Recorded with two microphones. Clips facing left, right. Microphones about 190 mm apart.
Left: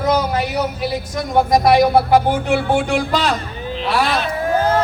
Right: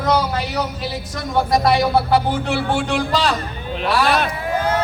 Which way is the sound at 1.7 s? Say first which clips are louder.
Left 5 dB; 50° left (ahead or behind).